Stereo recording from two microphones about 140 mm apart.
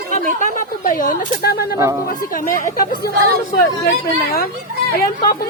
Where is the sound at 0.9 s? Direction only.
85° left.